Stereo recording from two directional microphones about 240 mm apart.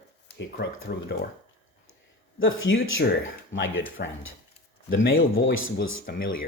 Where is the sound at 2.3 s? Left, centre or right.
Left.